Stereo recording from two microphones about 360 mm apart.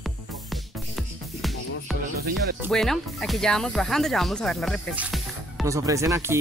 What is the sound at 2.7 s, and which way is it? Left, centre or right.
Speech, centre.